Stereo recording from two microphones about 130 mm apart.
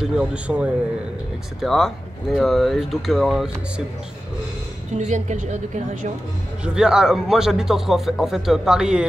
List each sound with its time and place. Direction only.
0.0 s a man's voice: 10° right (ahead or behind)
4.9 s a woman's voice: 70° right (ahead or behind)
6.6 s a man's voice: 5° right (ahead or behind)